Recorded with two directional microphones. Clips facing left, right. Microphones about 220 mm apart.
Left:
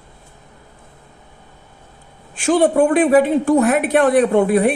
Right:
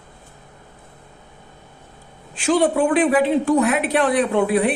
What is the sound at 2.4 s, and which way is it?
A woman's voice, 45° left (ahead or behind).